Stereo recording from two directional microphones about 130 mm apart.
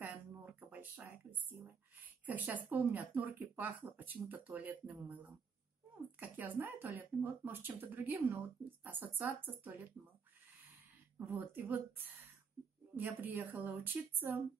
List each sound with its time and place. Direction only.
0.1 s a sound: 15° right (ahead or behind)
2.2 s speech: 10° right (ahead or behind)
11.1 s speech: 15° right (ahead or behind)
12.9 s speech: 15° right (ahead or behind)